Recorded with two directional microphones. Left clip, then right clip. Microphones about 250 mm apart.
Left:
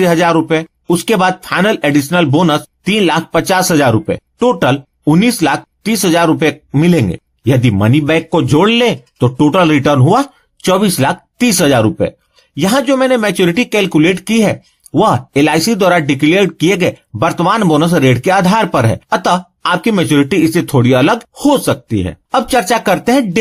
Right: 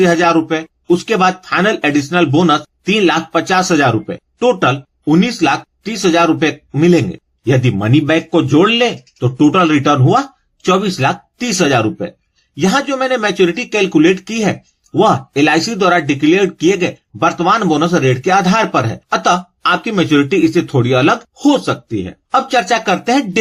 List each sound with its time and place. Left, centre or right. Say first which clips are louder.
0.0 s speech: left 1 dB; left